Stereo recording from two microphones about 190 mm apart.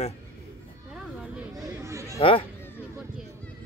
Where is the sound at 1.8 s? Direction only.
15° right (ahead or behind).